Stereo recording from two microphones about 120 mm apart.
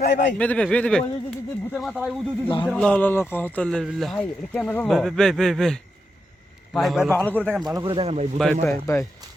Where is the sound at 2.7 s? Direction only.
10° left (ahead or behind).